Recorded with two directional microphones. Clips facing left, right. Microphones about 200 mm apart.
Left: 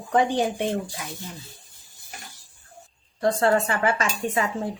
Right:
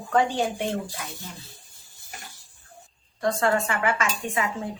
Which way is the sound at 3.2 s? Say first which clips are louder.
Left 3 dB; 30° left (ahead or behind).